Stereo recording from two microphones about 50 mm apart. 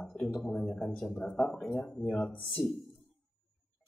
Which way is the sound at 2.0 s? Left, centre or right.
Left.